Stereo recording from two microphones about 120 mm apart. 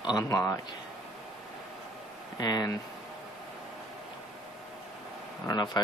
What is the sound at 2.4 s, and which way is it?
Speech, 35° left (ahead or behind).